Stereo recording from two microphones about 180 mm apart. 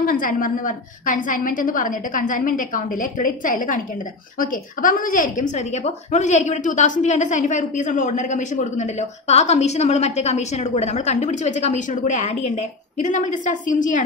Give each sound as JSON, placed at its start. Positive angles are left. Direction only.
{"t": 0.0, "sound": "a woman's voice", "side_deg": 50}